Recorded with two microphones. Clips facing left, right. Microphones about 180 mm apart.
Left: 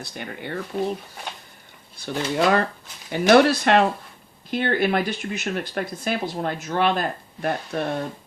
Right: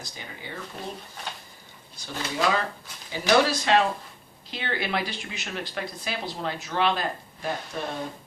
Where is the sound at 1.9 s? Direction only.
60° left (ahead or behind).